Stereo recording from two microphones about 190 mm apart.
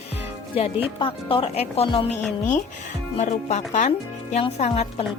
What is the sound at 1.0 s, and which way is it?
Speech, 30° left (ahead or behind).